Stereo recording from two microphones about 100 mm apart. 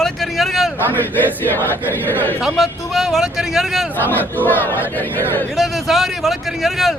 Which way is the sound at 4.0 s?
20° left (ahead or behind).